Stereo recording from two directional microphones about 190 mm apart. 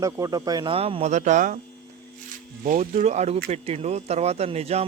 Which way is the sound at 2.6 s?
40° right (ahead or behind).